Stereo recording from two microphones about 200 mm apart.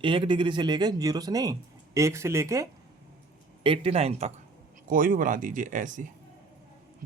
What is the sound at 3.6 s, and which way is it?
Speech, 30° right (ahead or behind).